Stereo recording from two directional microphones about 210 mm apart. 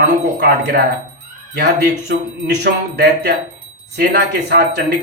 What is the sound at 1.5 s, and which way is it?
Speech, 55° right (ahead or behind).